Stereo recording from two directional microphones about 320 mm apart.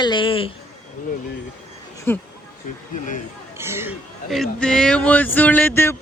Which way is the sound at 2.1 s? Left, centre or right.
Centre.